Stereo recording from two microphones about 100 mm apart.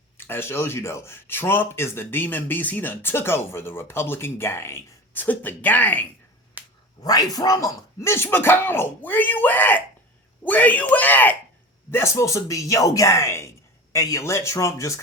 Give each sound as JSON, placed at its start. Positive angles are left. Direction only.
{"t": 0.2, "sound": "speech", "side_deg": 20}
{"t": 6.6, "sound": "finger snapping", "side_deg": -15}
{"t": 7.0, "sound": "speech", "side_deg": 40}